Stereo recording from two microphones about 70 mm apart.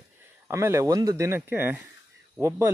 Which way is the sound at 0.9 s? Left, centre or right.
Right.